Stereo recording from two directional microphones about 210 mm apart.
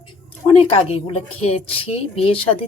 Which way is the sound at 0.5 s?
25° left (ahead or behind).